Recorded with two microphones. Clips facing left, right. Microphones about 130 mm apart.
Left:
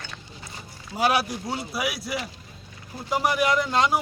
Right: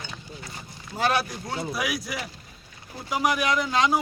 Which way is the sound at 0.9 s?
10° left (ahead or behind).